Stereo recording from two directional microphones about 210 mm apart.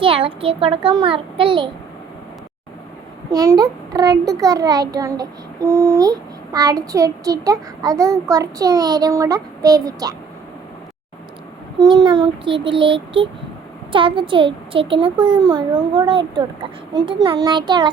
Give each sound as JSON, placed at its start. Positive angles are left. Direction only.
{"t": 0.0, "sound": "a child's voice", "side_deg": -25}
{"t": 3.3, "sound": "a child's voice", "side_deg": -15}
{"t": 11.9, "sound": "a child's voice", "side_deg": -20}